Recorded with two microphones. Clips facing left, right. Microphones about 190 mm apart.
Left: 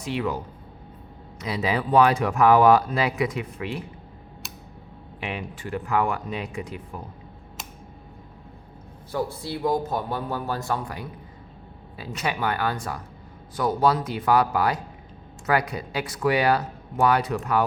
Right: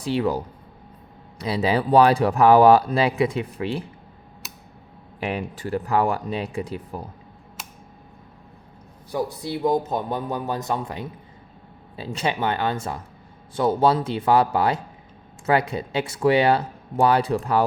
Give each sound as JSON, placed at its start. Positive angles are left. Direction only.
{"t": 0.0, "sound": "speech", "side_deg": -35}
{"t": 5.2, "sound": "speech", "side_deg": -40}
{"t": 9.1, "sound": "speech", "side_deg": -20}